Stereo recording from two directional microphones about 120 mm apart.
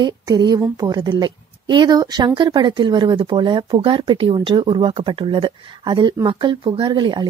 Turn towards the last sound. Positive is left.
turn(degrees=-40)  # may be behind; listen again after turning